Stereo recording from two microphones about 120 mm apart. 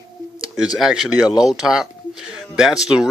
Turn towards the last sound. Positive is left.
turn(degrees=-5)  # may be behind; listen again after turning